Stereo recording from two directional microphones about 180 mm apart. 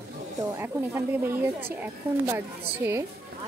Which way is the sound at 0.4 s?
15° right (ahead or behind).